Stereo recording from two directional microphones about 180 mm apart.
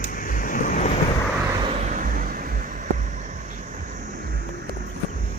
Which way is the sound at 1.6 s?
35° right (ahead or behind).